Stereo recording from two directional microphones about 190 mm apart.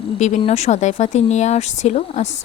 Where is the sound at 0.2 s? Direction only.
35° left (ahead or behind).